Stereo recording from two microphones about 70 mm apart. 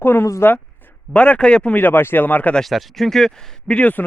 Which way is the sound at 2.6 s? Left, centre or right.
Centre.